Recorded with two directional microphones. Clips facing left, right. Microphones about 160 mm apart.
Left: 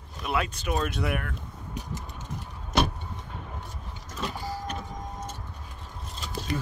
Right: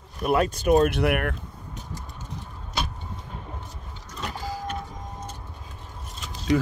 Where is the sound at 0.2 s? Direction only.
45° right (ahead or behind).